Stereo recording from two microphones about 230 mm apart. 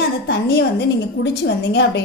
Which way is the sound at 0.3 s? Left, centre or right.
Left.